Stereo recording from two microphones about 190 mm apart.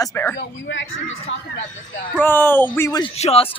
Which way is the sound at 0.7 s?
80° left.